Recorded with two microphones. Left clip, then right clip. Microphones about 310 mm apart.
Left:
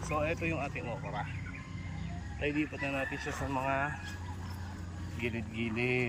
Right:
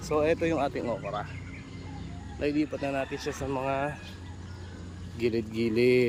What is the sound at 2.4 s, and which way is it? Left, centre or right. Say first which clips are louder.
Speech: right 5 dB; centre.